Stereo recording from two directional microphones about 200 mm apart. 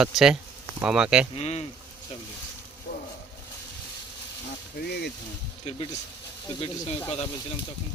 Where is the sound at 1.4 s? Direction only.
30° left (ahead or behind).